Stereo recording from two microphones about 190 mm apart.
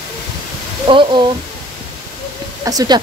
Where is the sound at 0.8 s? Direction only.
25° right (ahead or behind).